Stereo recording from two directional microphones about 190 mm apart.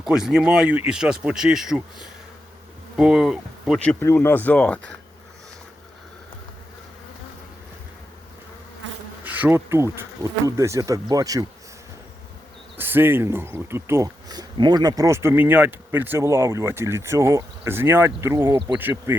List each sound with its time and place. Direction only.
0.0 s speech: 5° right (ahead or behind)
9.2 s speech: 10° right (ahead or behind)
12.7 s speech: 10° right (ahead or behind)